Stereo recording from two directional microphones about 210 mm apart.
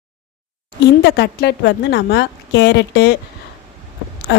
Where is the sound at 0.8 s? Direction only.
55° left (ahead or behind).